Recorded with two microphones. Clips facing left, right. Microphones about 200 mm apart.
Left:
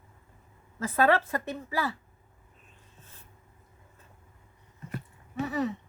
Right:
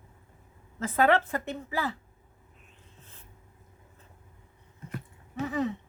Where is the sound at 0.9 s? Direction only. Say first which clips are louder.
Even; 20° right (ahead or behind).